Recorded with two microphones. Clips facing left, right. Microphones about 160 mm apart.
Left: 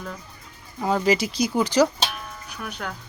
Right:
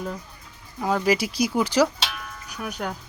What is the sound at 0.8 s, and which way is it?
Speech, centre (ahead or behind).